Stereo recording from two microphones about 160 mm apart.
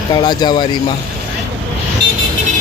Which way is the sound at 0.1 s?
30° left (ahead or behind).